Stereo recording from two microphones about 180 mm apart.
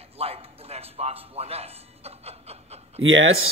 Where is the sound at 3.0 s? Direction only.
90° right.